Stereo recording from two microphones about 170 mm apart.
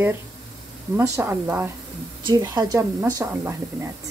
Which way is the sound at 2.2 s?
25° right (ahead or behind).